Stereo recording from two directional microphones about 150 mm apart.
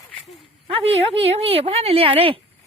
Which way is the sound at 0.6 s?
40° right (ahead or behind).